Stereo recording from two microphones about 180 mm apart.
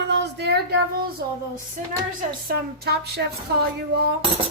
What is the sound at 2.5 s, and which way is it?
Speech, 60° right (ahead or behind).